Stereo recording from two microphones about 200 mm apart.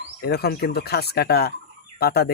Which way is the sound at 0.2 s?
50° left (ahead or behind).